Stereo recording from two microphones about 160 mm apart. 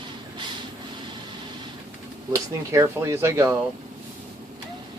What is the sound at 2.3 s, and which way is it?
Speech, 20° right (ahead or behind).